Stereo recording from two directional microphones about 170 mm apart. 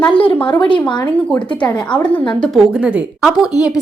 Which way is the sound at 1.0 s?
10° left (ahead or behind).